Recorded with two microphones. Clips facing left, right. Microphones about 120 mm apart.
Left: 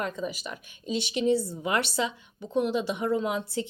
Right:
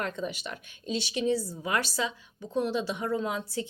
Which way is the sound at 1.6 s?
20° left (ahead or behind).